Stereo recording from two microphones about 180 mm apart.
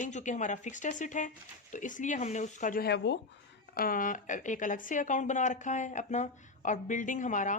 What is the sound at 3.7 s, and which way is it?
A woman's voice, 50° left (ahead or behind).